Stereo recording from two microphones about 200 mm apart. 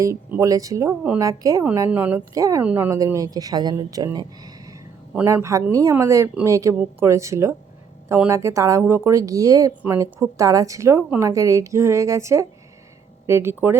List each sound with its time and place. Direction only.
0.0 s a woman's voice: 15° right (ahead or behind)